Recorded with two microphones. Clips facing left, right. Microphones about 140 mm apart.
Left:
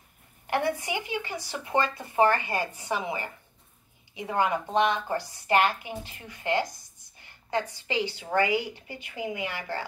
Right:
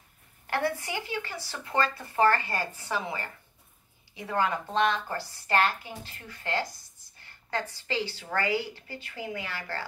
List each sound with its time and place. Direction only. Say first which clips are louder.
0.5 s speech: left 2 dB; 15° left (ahead or behind)